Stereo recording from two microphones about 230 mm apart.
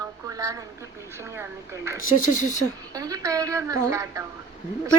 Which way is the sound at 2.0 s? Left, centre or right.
Left.